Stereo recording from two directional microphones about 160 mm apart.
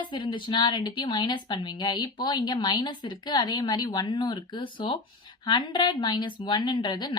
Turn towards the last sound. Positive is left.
turn(degrees=30)  # may be behind; listen again after turning